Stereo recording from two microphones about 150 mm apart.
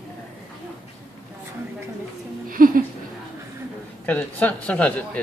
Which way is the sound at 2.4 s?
70° right (ahead or behind).